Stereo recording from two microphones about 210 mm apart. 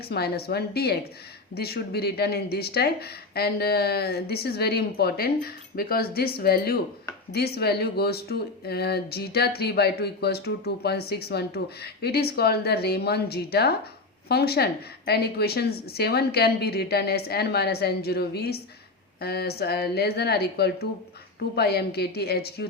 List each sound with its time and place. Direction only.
0.1 s speech: 50° left (ahead or behind)